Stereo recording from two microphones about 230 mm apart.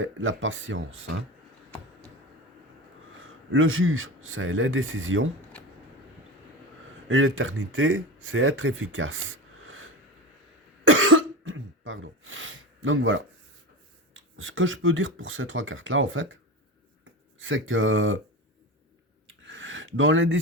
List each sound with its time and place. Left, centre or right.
0.0 s speech: right
3.2 s speech: right
7.1 s speech: right
10.8 s cough: right
14.1 s speech: right
17.4 s speech: right
19.5 s a sound: right